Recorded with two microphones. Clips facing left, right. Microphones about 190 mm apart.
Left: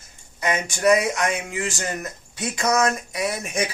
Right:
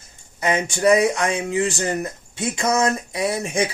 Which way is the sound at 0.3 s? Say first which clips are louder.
Right 3 dB; 30° right (ahead or behind).